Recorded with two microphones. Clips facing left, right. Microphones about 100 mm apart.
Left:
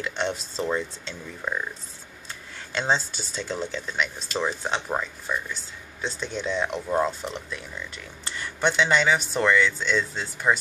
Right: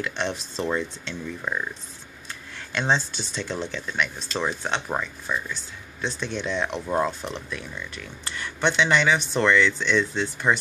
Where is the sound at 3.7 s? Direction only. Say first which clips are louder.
Right 1 dB; 30° left (ahead or behind).